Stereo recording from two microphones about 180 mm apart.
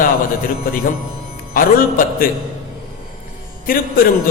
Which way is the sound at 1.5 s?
50° left (ahead or behind).